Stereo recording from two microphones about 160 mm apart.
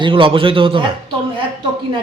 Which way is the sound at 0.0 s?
35° right (ahead or behind).